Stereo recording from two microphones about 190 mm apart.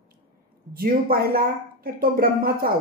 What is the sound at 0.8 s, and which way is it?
Speech, 50° right (ahead or behind).